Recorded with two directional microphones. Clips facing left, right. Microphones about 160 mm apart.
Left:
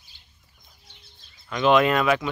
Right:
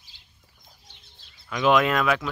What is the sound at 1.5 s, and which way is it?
Speech, centre (ahead or behind).